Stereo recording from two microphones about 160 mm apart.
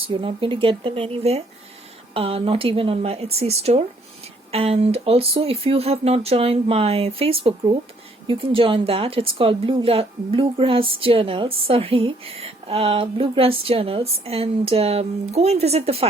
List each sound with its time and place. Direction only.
0.1 s speech: 35° right (ahead or behind)